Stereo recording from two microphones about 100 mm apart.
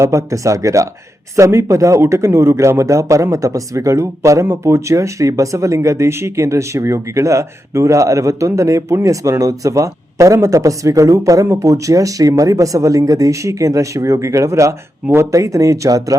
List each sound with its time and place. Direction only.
0.0 s a man's voice: 30° right (ahead or behind)